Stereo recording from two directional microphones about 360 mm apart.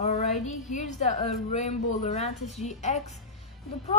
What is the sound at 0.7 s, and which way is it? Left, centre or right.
A woman's voice, centre.